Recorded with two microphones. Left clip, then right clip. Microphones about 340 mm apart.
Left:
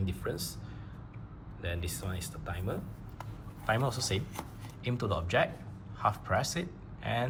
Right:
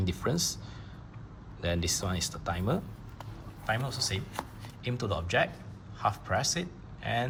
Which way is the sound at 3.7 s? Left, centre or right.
Centre.